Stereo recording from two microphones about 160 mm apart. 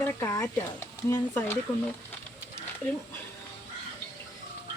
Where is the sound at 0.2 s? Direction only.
15° left (ahead or behind).